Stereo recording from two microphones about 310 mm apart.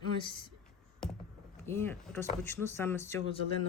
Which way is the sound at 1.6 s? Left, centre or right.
Centre.